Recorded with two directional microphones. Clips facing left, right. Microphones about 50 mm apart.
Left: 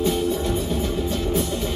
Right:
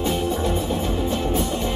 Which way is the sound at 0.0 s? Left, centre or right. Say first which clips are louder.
Left 1 dB; centre.